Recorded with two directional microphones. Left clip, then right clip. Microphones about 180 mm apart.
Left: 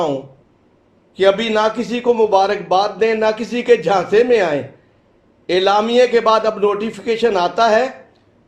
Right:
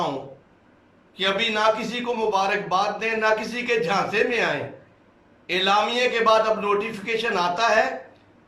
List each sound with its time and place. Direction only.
1.1 s a man's voice: 45° left (ahead or behind)